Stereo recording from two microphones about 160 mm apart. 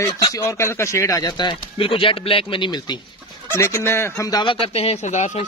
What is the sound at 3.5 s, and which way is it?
Speech, 15° left (ahead or behind).